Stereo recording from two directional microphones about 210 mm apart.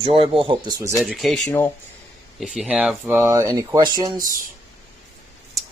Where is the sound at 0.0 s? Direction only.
25° right (ahead or behind).